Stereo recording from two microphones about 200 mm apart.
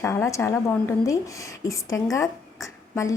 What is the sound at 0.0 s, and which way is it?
Speech, 10° left (ahead or behind).